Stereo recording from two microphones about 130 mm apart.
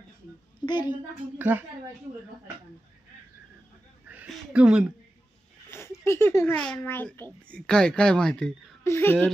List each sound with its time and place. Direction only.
0.7 s a woman's voice: 35° left (ahead or behind)
1.4 s speech: 15° right (ahead or behind)
4.3 s speech: 5° right (ahead or behind)
5.7 s speech: 20° left (ahead or behind)
8.8 s speech: 20° left (ahead or behind)